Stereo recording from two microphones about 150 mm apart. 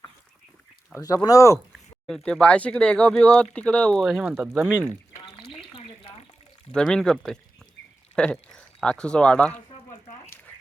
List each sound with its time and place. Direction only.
0.9 s speech: 25° left (ahead or behind)
2.0 s speech: 5° left (ahead or behind)
4.0 s speech: 5° right (ahead or behind)
5.4 s a sound: 35° left (ahead or behind)
6.7 s speech: 5° left (ahead or behind)